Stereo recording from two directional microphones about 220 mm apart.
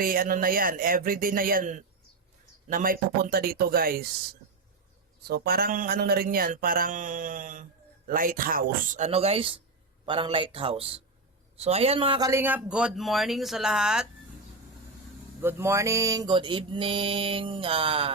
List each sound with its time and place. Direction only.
0.0 s speech: 40° right (ahead or behind)
5.2 s speech: 45° right (ahead or behind); by 9.6 s 25° right (ahead or behind)
10.1 s mantra: 25° right (ahead or behind)
11.5 s speech: 25° right (ahead or behind); by 14.1 s 5° right (ahead or behind)
15.4 s mantra: 10° right (ahead or behind)